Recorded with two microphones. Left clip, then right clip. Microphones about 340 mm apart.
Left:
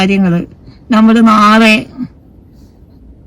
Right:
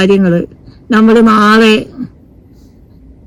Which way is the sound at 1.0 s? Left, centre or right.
Centre.